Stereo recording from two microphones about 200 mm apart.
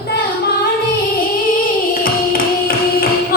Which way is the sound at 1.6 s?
45° left (ahead or behind).